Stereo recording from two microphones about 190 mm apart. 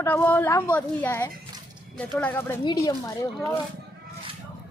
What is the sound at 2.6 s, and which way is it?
Speech, 20° left (ahead or behind).